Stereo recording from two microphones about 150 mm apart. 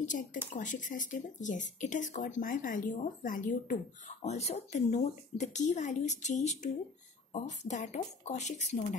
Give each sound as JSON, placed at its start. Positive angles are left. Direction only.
{"t": 0.0, "sound": "speech", "side_deg": 60}
{"t": 4.2, "sound": "speech", "side_deg": 45}